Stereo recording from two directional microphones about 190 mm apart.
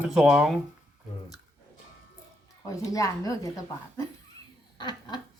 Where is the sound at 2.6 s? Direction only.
15° left (ahead or behind).